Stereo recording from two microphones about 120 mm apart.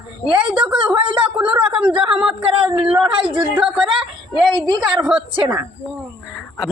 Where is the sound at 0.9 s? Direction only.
45° right (ahead or behind).